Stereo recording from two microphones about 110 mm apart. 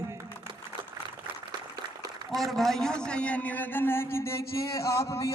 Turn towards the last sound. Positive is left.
turn(degrees=25)  # may be behind; listen again after turning